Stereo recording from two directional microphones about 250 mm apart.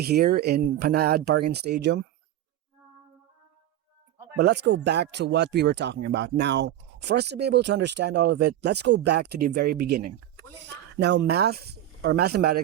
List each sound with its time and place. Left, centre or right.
0.0 s speech: right
4.4 s speech: right